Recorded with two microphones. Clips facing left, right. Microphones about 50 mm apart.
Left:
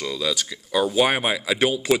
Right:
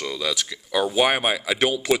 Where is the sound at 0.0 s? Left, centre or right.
Right.